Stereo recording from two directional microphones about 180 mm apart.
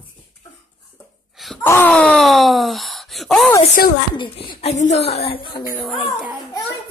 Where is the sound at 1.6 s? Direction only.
10° left (ahead or behind).